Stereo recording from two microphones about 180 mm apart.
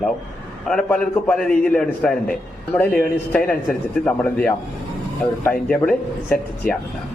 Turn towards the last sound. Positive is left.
turn(degrees=10)  # may be behind; listen again after turning